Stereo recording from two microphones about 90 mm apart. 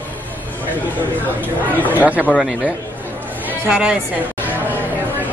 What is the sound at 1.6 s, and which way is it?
Speech, 20° left (ahead or behind).